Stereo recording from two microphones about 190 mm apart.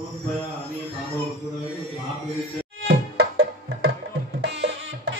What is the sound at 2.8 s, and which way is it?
Music, 60° right (ahead or behind).